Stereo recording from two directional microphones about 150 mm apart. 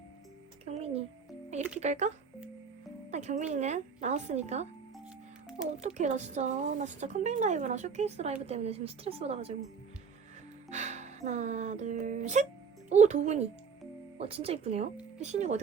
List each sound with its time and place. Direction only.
0.6 s music: 45° right (ahead or behind)
1.8 s speech: 50° right (ahead or behind)
5.7 s speech: 55° right (ahead or behind)
10.7 s speech: 50° right (ahead or behind)